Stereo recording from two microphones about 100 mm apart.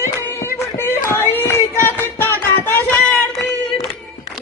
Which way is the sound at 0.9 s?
25° left (ahead or behind).